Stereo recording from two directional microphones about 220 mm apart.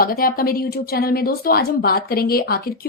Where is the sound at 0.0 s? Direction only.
40° left (ahead or behind).